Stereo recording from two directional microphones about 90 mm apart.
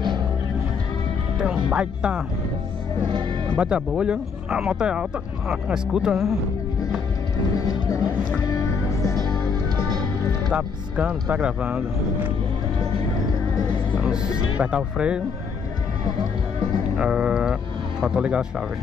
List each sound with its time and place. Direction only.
1.4 s speech: 10° right (ahead or behind)
3.1 s music: 60° right (ahead or behind)
3.5 s speech: 10° right (ahead or behind)
7.5 s music: 40° left (ahead or behind)
10.5 s speech: 10° right (ahead or behind)
13.9 s speech: 10° right (ahead or behind)
16.9 s speech: 10° right (ahead or behind)